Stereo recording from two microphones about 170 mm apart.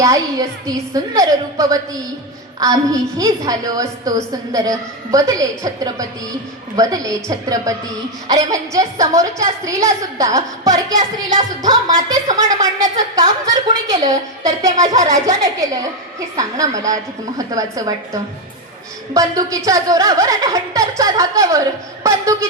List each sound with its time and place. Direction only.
0.0 s a woman's voice: 20° right (ahead or behind)